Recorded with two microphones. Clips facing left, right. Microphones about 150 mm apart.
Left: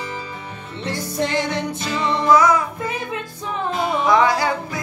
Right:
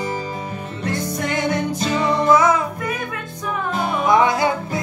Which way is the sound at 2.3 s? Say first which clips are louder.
Left 1 dB; 25° right (ahead or behind).